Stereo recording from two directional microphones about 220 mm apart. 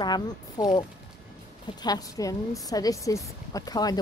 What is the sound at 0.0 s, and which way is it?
Speech, 20° left (ahead or behind).